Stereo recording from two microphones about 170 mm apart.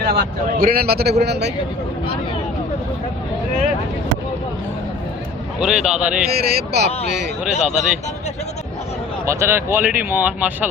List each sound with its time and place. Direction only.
0.0 s a man's voice: 60° right (ahead or behind)
5.5 s a man's voice: 5° right (ahead or behind)
6.4 s speech: 75° right (ahead or behind)
7.5 s speech: 40° left (ahead or behind)
9.2 s speech: 15° right (ahead or behind)